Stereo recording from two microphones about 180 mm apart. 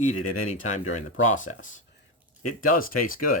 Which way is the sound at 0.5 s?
40° left (ahead or behind).